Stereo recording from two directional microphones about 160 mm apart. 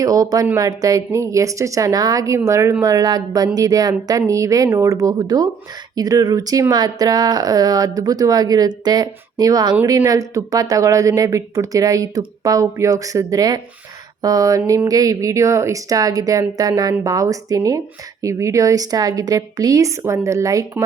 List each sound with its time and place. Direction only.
0.0 s speech: 20° right (ahead or behind)
14.2 s a sound: 20° right (ahead or behind)
14.7 s speech: 20° right (ahead or behind)